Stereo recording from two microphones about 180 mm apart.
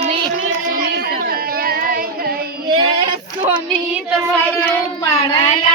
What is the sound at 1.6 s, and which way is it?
Child singing, 55° right (ahead or behind).